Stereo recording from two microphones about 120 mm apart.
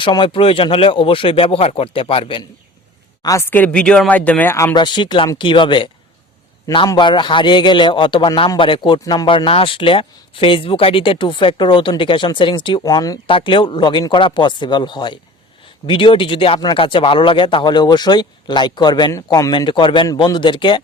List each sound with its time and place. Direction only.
0.0 s speech: 40° left (ahead or behind)
3.5 s speech: 10° left (ahead or behind)
4.7 s speech: 40° left (ahead or behind)
12.8 s speech: 30° left (ahead or behind)
13.2 s speech: 45° left (ahead or behind)
19.1 s speech: 25° left (ahead or behind)
19.5 s speech: 40° left (ahead or behind)